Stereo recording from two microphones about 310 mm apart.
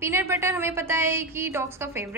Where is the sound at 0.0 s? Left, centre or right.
Centre.